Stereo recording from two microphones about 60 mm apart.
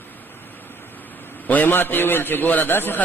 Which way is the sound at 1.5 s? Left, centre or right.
Left.